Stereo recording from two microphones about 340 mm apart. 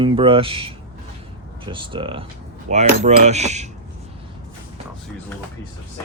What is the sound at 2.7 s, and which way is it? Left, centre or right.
Coin, centre.